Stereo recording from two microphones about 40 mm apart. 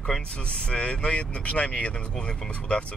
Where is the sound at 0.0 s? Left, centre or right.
Left.